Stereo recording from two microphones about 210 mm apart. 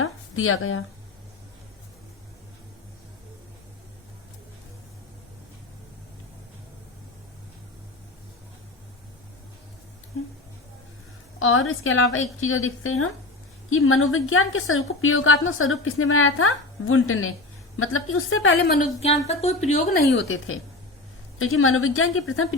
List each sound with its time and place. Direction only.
0.0 s a sound: 75° left (ahead or behind)
11.3 s a woman's voice: 75° left (ahead or behind)
18.6 s a woman's voice: 50° left (ahead or behind)
18.9 s a woman's voice: 30° left (ahead or behind)
20.1 s a woman's voice: 65° left (ahead or behind)